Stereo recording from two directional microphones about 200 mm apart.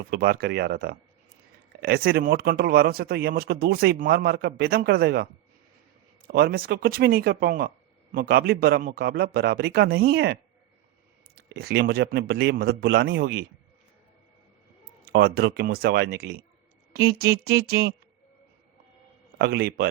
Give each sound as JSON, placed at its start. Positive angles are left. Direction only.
{"t": 0.0, "sound": "speech", "side_deg": -50}
{"t": 11.3, "sound": "speech", "side_deg": -50}
{"t": 15.0, "sound": "speech", "side_deg": -55}
{"t": 19.4, "sound": "speech", "side_deg": -55}